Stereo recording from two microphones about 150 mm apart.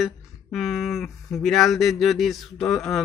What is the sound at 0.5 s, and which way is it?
Speech, centre (ahead or behind).